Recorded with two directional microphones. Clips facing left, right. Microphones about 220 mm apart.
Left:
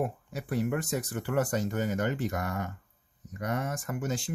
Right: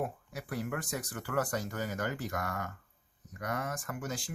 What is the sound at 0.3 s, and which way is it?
Speech, 25° left (ahead or behind).